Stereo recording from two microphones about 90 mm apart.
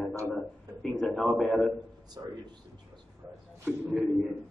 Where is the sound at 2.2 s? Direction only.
40° right (ahead or behind).